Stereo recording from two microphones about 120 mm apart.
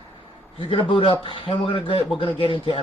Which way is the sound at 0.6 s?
45° left (ahead or behind).